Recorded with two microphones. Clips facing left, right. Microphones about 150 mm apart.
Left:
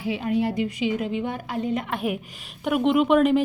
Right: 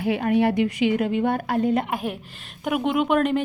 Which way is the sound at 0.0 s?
60° right (ahead or behind).